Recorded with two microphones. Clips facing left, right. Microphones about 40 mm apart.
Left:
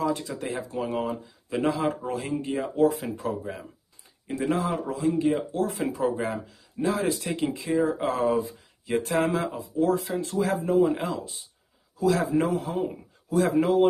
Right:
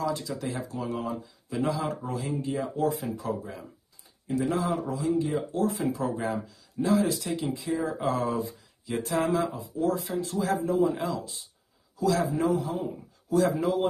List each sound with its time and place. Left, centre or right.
0.0 s speech: left
12.8 s speech: left
13.5 s speech: left